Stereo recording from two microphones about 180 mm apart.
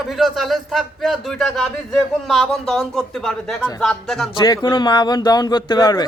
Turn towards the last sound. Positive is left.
turn(degrees=20)  # may be behind; listen again after turning